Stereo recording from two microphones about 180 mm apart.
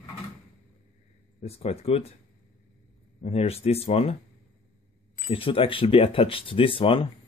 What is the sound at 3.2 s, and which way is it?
Speech, 35° left (ahead or behind).